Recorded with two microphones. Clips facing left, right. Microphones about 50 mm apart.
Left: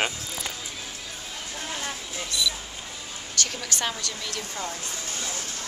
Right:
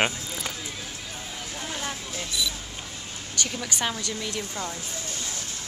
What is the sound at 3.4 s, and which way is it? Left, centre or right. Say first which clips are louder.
Speech: even; centre.